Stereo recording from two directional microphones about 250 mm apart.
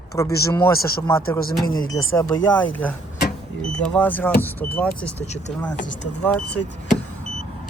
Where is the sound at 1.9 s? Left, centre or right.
Left.